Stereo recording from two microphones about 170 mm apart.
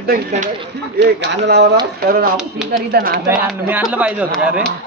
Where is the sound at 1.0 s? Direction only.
90° right.